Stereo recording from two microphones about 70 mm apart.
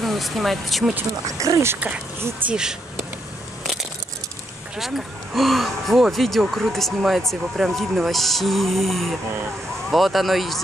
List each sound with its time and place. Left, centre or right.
0.0 s speech: centre
1.2 s speech: right
2.4 s speech: right
4.7 s speech: centre